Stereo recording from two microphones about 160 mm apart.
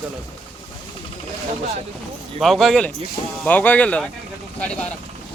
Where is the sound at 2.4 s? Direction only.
Centre (ahead or behind).